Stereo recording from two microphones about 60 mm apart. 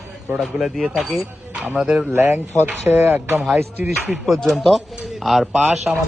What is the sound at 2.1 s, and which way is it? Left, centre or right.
Speech, right.